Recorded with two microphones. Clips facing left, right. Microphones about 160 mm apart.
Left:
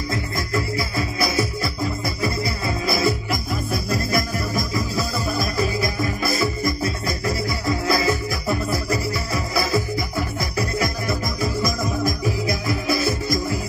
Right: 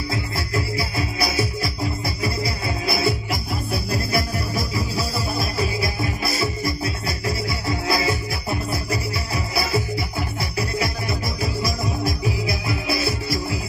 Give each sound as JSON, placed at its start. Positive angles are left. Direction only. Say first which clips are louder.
{"t": 1.6, "sound": "music", "louder": "left 1 dB", "side_deg": -35}
{"t": 7.6, "sound": "music", "louder": "left 2 dB", "side_deg": -30}
{"t": 10.6, "sound": "music", "louder": "left 1 dB", "side_deg": 40}